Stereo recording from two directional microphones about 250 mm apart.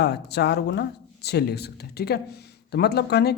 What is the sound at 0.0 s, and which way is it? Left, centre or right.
A man's voice, left.